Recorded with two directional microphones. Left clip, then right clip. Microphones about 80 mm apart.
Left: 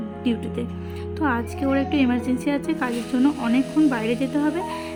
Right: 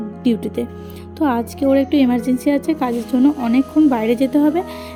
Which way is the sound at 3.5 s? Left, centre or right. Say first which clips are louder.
Right 5 dB; right.